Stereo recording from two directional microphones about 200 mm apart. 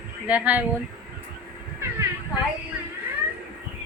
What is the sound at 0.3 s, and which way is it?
Speech, 10° right (ahead or behind).